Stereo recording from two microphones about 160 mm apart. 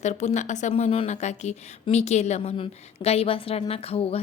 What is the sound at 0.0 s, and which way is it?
A woman's voice, 45° left (ahead or behind).